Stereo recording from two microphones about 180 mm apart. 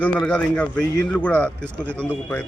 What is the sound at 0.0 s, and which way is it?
A man's voice, 5° left (ahead or behind).